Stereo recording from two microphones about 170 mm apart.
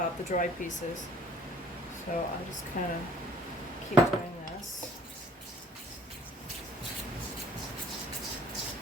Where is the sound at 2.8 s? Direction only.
55° left (ahead or behind).